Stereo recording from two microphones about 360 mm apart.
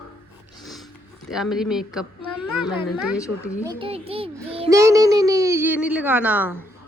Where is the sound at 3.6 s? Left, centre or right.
Centre.